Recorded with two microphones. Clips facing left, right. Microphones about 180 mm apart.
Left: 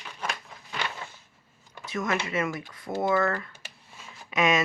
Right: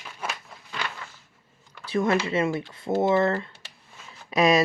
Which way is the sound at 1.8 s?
30° right (ahead or behind).